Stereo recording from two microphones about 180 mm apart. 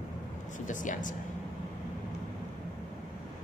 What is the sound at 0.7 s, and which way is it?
Speech, 45° left (ahead or behind).